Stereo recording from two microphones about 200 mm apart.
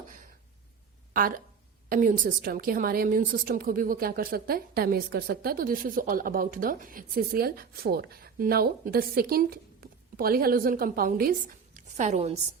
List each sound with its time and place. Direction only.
1.9 s a woman's voice: 40° right (ahead or behind)